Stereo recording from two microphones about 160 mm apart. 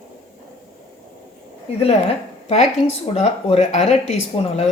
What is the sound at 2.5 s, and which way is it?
Speech, 45° left (ahead or behind).